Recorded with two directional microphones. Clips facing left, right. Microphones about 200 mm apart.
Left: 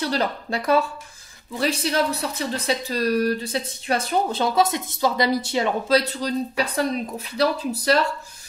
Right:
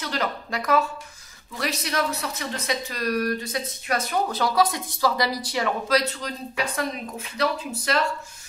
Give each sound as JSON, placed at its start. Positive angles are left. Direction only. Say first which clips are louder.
{"t": 0.0, "sound": "speech", "louder": "left 4 dB", "side_deg": 30}